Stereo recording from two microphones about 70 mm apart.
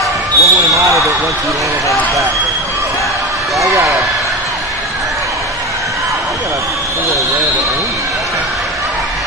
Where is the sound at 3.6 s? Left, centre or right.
Right.